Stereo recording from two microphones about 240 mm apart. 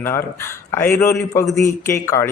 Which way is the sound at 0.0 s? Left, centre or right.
Centre.